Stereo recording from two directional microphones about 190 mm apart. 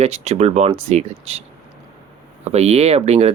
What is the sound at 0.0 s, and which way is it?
Speech, 35° right (ahead or behind).